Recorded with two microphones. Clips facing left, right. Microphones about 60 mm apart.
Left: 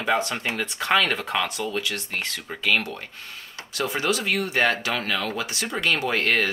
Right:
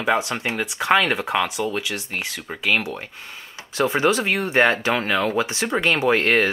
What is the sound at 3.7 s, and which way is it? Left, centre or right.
Speech, right.